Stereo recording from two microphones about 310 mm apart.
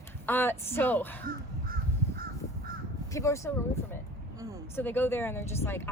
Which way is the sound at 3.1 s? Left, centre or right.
Centre.